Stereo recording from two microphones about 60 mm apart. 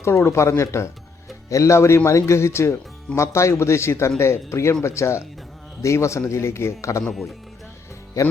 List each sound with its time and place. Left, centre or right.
0.0 s a man's voice: left
7.0 s speech: centre
8.2 s a man's voice: left